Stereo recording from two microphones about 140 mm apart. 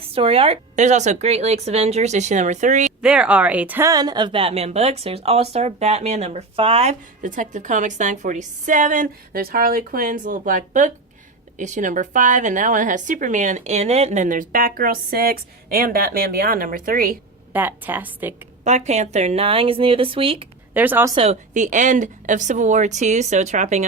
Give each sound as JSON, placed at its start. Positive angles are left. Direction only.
{"t": 0.0, "sound": "a woman's voice", "side_deg": -40}
{"t": 0.8, "sound": "speech", "side_deg": -55}
{"t": 3.0, "sound": "a woman's voice", "side_deg": -5}
{"t": 3.8, "sound": "a woman's voice", "side_deg": -30}
{"t": 7.2, "sound": "a woman's voice", "side_deg": -70}
{"t": 17.5, "sound": "a woman's voice", "side_deg": -15}
{"t": 18.6, "sound": "speech", "side_deg": -55}
{"t": 20.7, "sound": "a woman's voice", "side_deg": -15}
{"t": 21.5, "sound": "speech", "side_deg": -65}